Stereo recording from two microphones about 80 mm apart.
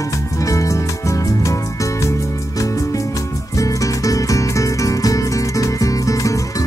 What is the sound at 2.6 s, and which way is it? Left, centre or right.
Music, left.